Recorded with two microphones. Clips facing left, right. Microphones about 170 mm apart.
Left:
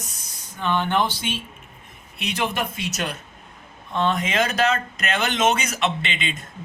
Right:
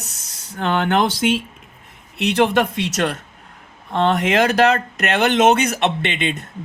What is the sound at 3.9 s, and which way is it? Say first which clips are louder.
Speech: right 5 dB; 70° right (ahead or behind).